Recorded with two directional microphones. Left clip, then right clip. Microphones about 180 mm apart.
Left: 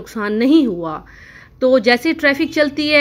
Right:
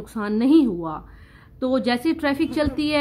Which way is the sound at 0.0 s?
5° left (ahead or behind).